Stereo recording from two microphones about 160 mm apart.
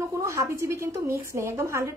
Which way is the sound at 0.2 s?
15° right (ahead or behind).